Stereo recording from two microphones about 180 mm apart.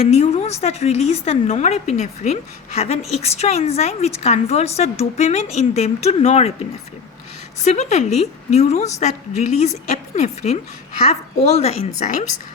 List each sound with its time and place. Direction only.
0.1 s a woman's voice: 35° left (ahead or behind)
7.6 s a woman's voice: 40° left (ahead or behind)